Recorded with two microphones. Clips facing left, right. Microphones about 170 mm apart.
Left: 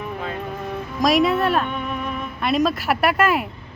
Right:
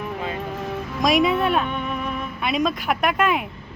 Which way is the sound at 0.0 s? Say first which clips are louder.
Even; centre (ahead or behind).